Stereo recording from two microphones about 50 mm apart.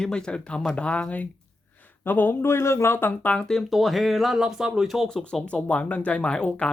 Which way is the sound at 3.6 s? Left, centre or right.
Centre.